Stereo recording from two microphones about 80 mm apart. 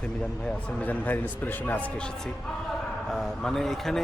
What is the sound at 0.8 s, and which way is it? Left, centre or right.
A man's voice, centre.